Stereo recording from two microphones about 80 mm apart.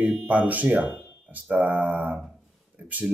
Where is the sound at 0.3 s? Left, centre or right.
Centre.